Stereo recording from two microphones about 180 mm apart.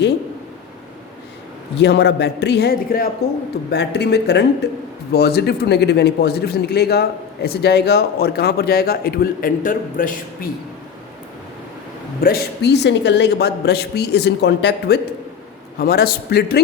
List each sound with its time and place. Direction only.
1.8 s a woman's voice: 70° left (ahead or behind); by 10.2 s 50° left (ahead or behind)
12.2 s a woman's voice: 60° left (ahead or behind)
15.8 s speech: 60° left (ahead or behind)